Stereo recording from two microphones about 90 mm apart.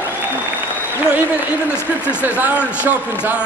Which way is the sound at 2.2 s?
20° right (ahead or behind).